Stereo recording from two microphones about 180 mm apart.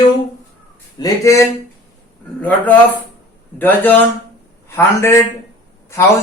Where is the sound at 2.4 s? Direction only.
10° left (ahead or behind).